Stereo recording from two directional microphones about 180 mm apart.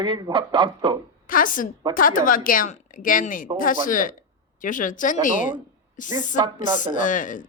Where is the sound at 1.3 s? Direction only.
50° left (ahead or behind).